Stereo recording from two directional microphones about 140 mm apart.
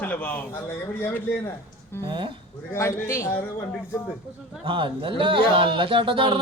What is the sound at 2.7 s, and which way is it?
Speech, 20° left (ahead or behind).